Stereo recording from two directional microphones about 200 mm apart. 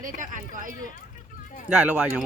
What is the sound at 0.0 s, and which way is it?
Speech, 40° right (ahead or behind).